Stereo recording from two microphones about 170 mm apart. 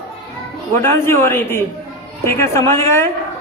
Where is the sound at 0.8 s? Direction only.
15° left (ahead or behind).